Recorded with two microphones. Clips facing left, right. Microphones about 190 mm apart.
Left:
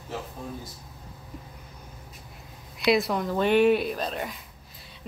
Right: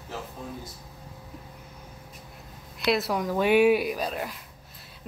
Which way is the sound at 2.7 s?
Centre (ahead or behind).